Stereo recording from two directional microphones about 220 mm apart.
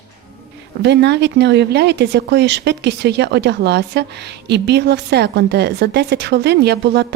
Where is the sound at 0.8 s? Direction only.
50° right (ahead or behind).